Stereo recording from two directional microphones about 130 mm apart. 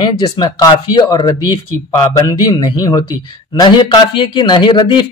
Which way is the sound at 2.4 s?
30° left (ahead or behind).